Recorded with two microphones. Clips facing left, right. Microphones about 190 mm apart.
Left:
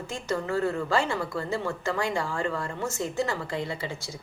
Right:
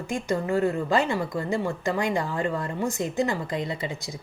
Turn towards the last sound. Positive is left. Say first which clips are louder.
# right 2 dB
turn(degrees=-15)  # may be behind; listen again after turning